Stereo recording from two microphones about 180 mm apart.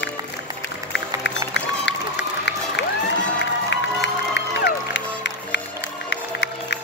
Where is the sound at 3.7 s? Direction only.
80° left.